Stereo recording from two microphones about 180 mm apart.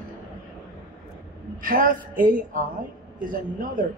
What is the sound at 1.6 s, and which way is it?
A woman's voice, 50° right (ahead or behind).